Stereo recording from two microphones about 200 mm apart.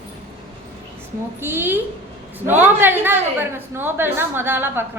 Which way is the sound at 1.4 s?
10° right (ahead or behind).